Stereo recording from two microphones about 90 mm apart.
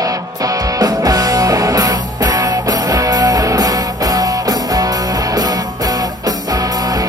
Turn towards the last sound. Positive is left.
turn(degrees=-45)  # may be behind; listen again after turning